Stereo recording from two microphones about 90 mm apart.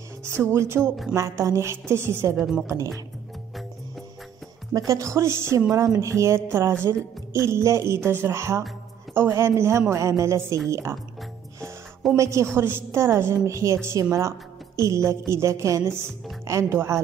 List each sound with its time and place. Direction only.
0.2 s speech: 30° right (ahead or behind)
2.3 s a woman's voice: 5° right (ahead or behind)
2.6 s speech: 35° right (ahead or behind)
4.7 s a woman's voice: 35° right (ahead or behind)
12.2 s a woman's voice: 35° right (ahead or behind)